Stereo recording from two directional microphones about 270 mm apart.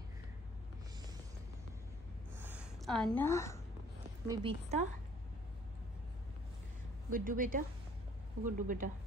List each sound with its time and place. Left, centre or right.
2.3 s a sound: centre
4.3 s a woman's voice: centre
7.1 s a woman's voice: right